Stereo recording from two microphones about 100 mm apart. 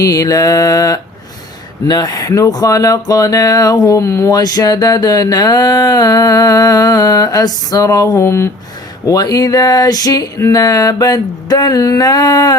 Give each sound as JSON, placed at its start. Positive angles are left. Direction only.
{"t": 0.0, "sound": "speech", "side_deg": 35}